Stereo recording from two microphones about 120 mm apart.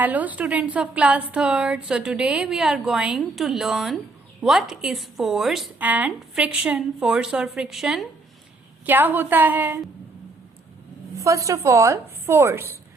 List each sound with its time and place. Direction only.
0.0 s a woman's voice: 15° right (ahead or behind)
5.8 s a woman's voice: 15° right (ahead or behind)
8.9 s a woman's voice: 15° right (ahead or behind)
11.2 s speech: 25° right (ahead or behind)